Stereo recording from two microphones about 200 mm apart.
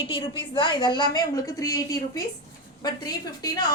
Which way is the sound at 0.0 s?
25° left (ahead or behind).